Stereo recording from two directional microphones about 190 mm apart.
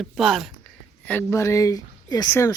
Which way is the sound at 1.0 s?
10° left (ahead or behind).